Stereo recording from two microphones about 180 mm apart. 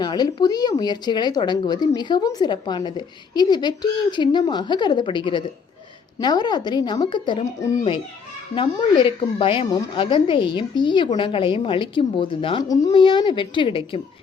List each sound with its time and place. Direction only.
0.0 s a woman's voice: 25° left (ahead or behind)